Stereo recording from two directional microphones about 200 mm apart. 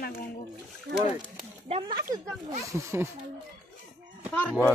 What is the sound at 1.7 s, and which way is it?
Speech, 25° right (ahead or behind).